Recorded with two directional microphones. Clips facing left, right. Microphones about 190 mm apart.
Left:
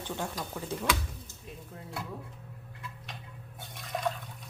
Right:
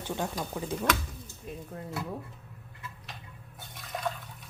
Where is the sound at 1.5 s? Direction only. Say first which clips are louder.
Right 6 dB; 50° right (ahead or behind).